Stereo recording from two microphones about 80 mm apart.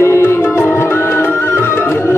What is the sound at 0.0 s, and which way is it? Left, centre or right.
Music, left.